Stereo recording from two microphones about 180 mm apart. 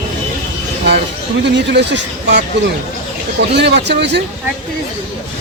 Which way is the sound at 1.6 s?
75° right (ahead or behind).